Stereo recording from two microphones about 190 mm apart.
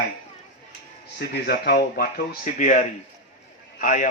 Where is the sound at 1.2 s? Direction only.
55° left (ahead or behind).